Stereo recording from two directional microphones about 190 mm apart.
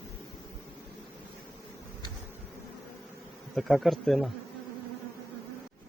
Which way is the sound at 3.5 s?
Centre (ahead or behind).